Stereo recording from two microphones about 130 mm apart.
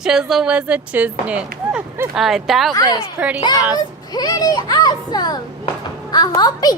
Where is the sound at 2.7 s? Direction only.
25° left (ahead or behind).